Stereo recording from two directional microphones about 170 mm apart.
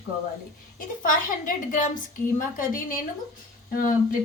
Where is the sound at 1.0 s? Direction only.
50° left (ahead or behind).